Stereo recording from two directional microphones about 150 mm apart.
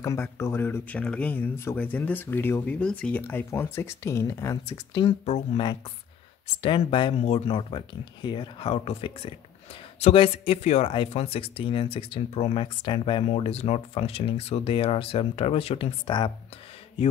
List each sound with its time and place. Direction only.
0.0 s speech: 20° left (ahead or behind)
6.6 s speech: 35° left (ahead or behind)